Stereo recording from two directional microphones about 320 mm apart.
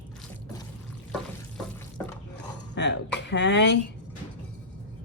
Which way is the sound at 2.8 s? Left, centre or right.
Left.